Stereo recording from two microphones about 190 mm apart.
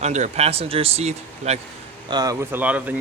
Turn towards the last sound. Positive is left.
turn(degrees=-10)  # may be behind; listen again after turning